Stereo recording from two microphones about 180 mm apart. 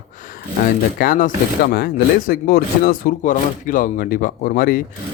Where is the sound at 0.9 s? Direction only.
50° left (ahead or behind).